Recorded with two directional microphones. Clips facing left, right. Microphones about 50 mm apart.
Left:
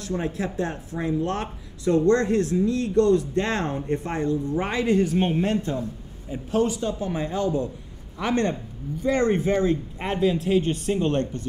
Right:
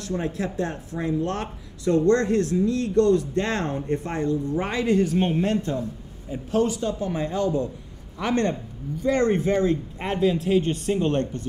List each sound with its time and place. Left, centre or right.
0.0 s speech: centre